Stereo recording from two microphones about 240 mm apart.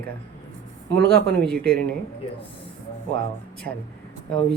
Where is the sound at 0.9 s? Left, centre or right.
Right.